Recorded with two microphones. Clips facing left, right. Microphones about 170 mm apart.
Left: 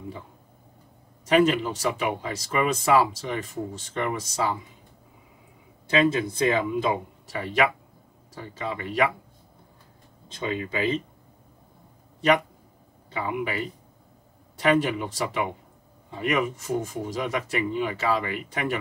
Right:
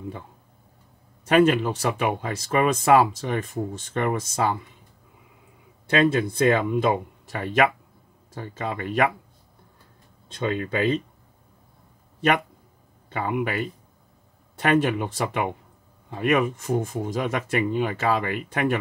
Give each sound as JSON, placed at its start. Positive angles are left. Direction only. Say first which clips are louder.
{"t": 1.2, "sound": "speech", "louder": "right 2 dB", "side_deg": -55}
{"t": 5.9, "sound": "speech", "louder": "right 2 dB", "side_deg": -60}
{"t": 10.3, "sound": "speech", "louder": "right 3 dB", "side_deg": -55}
{"t": 13.1, "sound": "speech", "louder": "right 3 dB", "side_deg": -55}